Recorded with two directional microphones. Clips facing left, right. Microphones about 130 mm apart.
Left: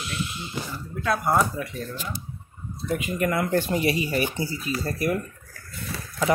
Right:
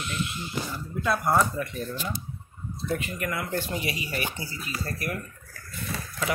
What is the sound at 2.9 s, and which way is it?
Speech, 15° left (ahead or behind).